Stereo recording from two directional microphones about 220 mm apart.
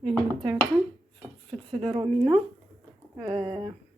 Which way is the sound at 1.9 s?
25° right (ahead or behind).